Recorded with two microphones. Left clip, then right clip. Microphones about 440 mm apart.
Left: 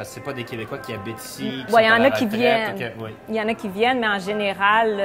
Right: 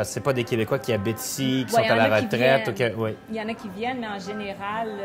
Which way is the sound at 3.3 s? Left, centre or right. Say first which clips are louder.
Left 9 dB; left.